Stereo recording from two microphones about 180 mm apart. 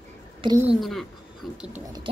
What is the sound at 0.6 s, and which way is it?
A woman's voice, 5° right (ahead or behind).